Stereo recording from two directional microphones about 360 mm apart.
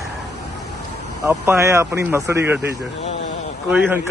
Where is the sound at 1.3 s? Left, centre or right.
Centre.